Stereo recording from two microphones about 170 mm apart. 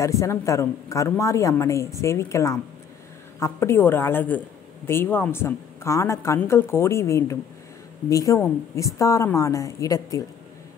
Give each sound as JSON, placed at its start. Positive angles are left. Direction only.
{"t": 0.0, "sound": "a woman's voice", "side_deg": 20}